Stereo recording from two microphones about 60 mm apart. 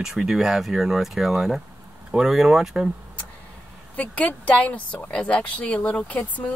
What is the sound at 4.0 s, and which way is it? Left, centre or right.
Speech, left.